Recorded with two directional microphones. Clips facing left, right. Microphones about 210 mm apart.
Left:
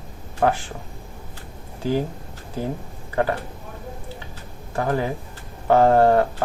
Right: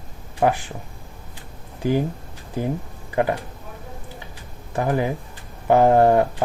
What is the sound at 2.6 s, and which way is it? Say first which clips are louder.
Speech: right 2 dB; 15° right (ahead or behind).